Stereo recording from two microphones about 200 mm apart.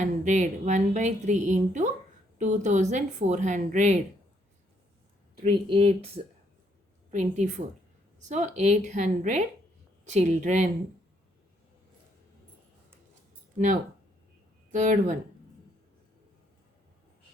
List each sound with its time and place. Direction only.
0.0 s speech: 35° right (ahead or behind)
5.4 s speech: 30° right (ahead or behind)
7.1 s speech: 35° right (ahead or behind)
14.7 s speech: 40° right (ahead or behind)